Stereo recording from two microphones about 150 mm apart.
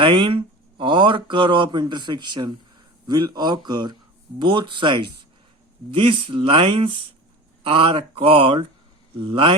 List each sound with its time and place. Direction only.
0.0 s a man's voice: 35° right (ahead or behind)